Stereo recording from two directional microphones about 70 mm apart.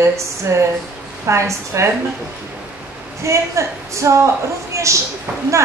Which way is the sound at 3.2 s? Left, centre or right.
Right.